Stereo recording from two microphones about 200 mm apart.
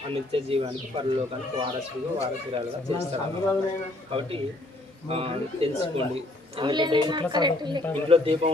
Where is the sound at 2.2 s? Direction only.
30° right (ahead or behind).